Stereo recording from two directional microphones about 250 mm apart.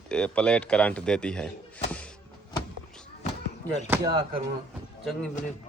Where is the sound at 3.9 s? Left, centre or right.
Centre.